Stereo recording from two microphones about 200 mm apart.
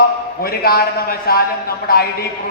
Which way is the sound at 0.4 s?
50° left (ahead or behind).